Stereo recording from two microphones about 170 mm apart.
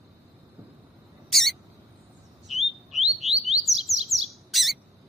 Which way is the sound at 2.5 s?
Centre (ahead or behind).